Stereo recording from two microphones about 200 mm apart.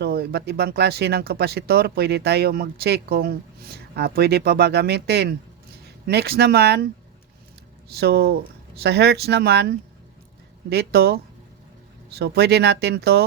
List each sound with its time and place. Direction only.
0.0 s speech: 50° right (ahead or behind)
7.9 s speech: 55° right (ahead or behind)